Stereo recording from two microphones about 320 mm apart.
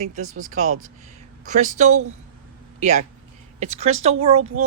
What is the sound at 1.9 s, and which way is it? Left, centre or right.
Speech, right.